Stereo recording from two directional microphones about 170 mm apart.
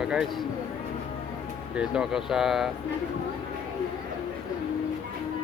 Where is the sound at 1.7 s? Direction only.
5° right (ahead or behind).